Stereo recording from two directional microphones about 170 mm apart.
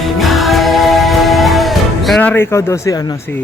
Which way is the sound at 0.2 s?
Centre (ahead or behind).